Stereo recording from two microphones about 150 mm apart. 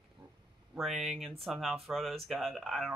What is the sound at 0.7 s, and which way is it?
Speech, centre (ahead or behind).